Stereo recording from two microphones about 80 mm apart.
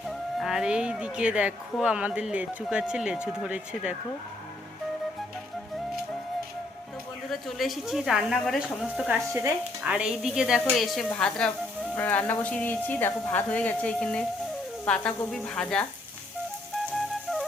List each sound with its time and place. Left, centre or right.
0.1 s speech: centre
7.3 s a woman's voice: centre
11.9 s speech: left
14.8 s sizzle: centre